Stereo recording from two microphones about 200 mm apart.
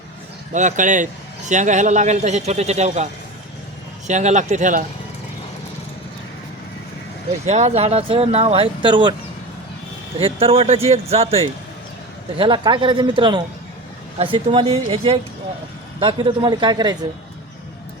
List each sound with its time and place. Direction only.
0.5 s speech: 40° right (ahead or behind)
7.4 s speech: 35° right (ahead or behind)
10.2 s speech: 30° right (ahead or behind)